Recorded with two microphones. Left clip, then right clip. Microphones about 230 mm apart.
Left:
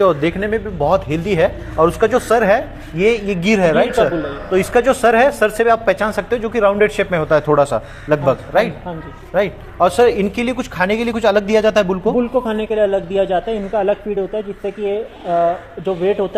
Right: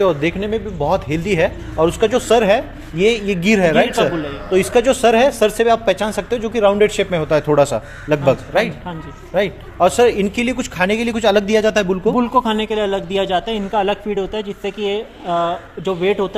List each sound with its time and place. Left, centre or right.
0.0 s speech: centre
12.1 s speech: right
12.5 s a man's voice: right